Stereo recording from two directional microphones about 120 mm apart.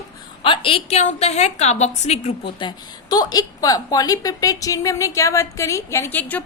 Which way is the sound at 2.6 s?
35° left (ahead or behind).